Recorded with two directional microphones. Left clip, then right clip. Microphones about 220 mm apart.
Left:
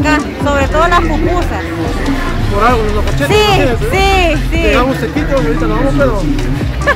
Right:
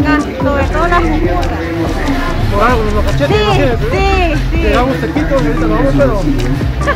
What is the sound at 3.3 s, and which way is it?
Speech, 30° left (ahead or behind).